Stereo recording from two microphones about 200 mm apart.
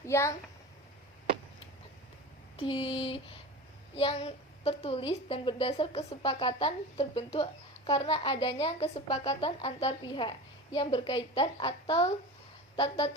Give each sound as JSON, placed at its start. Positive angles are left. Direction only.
{"t": 0.0, "sound": "a child's voice", "side_deg": 15}
{"t": 2.6, "sound": "a woman's voice", "side_deg": 25}